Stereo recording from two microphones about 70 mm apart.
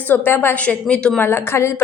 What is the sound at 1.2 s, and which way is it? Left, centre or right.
Speech, left.